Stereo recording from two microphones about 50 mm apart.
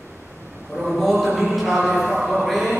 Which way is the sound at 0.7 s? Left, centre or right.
Centre.